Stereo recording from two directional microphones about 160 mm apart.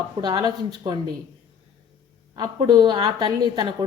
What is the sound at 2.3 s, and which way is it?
A woman's voice, 25° right (ahead or behind).